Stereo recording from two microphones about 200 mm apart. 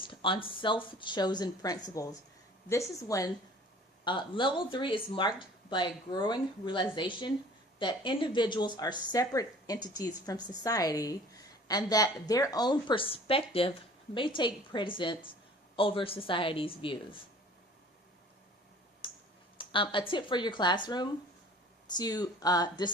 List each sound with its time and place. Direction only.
0.0 s a woman's voice: 25° left (ahead or behind)
19.0 s a sound: 25° left (ahead or behind)
19.5 s speech: 25° left (ahead or behind)